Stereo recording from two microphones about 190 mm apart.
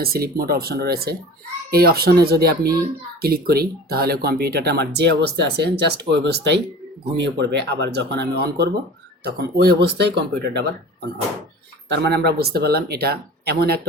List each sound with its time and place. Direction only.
0.0 s speech: 50° right (ahead or behind)